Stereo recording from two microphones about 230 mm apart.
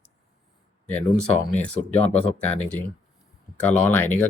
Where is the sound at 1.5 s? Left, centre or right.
Left.